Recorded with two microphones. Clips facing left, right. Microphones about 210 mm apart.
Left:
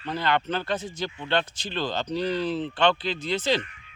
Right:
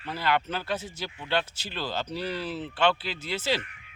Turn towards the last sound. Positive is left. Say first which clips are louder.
# left 4 dB
turn(degrees=-5)  # may be behind; listen again after turning